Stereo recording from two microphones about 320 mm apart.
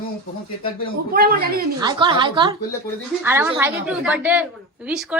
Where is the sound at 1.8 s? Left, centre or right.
Centre.